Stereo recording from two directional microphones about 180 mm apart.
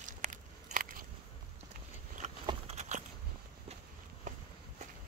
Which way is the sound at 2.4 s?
40° right (ahead or behind).